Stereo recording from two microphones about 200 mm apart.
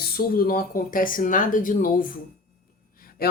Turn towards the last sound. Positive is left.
turn(degrees=50)  # may be behind; listen again after turning